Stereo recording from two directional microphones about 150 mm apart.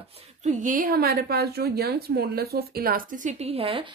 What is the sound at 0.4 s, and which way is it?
A woman's voice, 55° right (ahead or behind).